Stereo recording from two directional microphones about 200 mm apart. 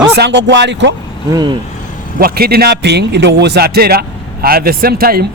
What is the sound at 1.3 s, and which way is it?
Speech, 20° right (ahead or behind).